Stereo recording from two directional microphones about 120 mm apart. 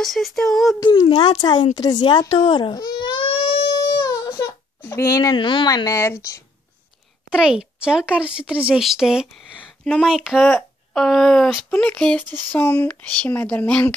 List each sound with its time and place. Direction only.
0.0 s speech: centre (ahead or behind)
0.8 s speech: 40° left (ahead or behind)
4.0 s baby cry: 25° left (ahead or behind)
5.9 s speech: 25° left (ahead or behind)
7.2 s a woman's voice: 5° right (ahead or behind); by 13.9 s 15° left (ahead or behind)